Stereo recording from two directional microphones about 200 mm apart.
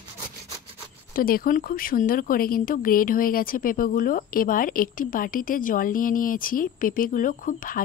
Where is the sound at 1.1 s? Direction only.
45° left (ahead or behind).